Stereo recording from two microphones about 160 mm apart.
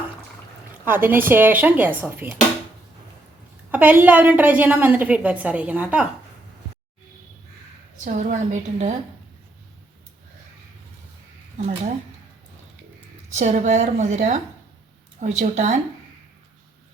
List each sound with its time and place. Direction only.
0.9 s a woman's voice: 15° right (ahead or behind)
3.7 s a woman's voice: 10° right (ahead or behind)
8.0 s a woman's voice: 50° right (ahead or behind)
13.3 s a woman's voice: 45° right (ahead or behind)